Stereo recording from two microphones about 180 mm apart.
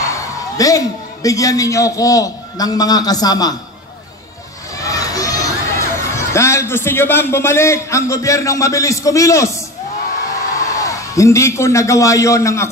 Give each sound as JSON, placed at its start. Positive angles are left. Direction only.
{"t": 0.0, "sound": "a man's voice", "side_deg": 15}
{"t": 4.7, "sound": "speech", "side_deg": 20}
{"t": 10.7, "sound": "a man's voice", "side_deg": 20}